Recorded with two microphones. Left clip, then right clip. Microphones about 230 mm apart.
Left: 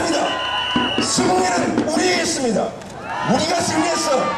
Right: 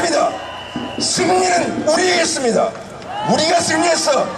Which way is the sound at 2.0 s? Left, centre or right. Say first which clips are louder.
Right 3 dB; centre.